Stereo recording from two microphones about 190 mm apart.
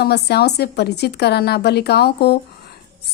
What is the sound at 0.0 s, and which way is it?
A woman's voice, 60° left (ahead or behind).